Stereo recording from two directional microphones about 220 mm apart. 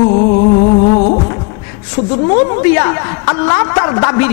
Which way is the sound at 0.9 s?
35° left (ahead or behind).